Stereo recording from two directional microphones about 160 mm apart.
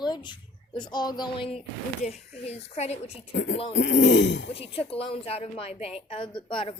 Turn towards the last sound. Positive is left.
turn(degrees=30)  # may be behind; listen again after turning